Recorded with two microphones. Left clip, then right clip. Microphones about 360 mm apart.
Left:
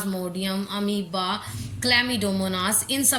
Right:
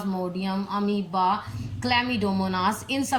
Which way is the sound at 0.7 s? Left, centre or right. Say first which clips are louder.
Right 1 dB; right.